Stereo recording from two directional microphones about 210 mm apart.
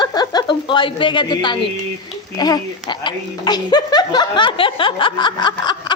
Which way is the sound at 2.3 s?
20° left (ahead or behind).